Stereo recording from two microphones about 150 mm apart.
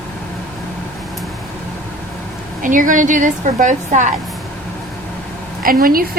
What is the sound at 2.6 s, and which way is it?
A woman's voice, 60° right (ahead or behind).